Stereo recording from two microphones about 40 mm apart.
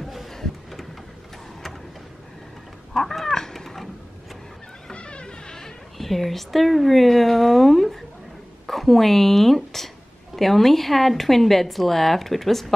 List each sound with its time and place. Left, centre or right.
0.0 s a sound: centre
2.9 s cat: centre
4.9 s vehicle: left
5.6 s a woman's voice: centre